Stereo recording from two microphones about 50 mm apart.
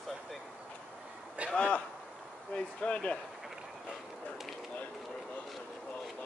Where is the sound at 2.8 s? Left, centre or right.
Left.